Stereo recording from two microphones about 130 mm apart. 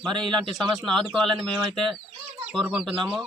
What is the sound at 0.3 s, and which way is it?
Speech, 40° right (ahead or behind).